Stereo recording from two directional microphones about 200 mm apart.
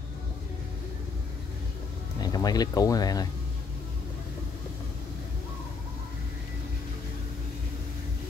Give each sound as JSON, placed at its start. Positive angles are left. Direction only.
{"t": 2.1, "sound": "speech", "side_deg": 20}